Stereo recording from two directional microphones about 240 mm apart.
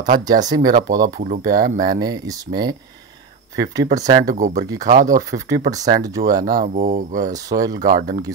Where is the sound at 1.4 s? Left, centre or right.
Right.